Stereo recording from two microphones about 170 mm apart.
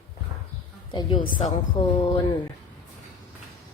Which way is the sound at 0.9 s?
30° left (ahead or behind).